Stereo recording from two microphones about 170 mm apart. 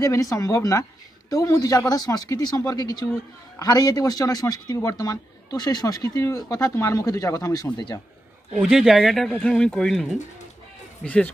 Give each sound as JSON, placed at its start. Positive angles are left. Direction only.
{"t": 0.0, "sound": "a man's voice", "side_deg": 20}
{"t": 8.5, "sound": "speech", "side_deg": 0}